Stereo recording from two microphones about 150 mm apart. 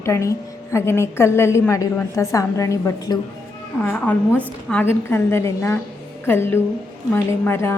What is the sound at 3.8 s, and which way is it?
A woman's voice, 10° left (ahead or behind).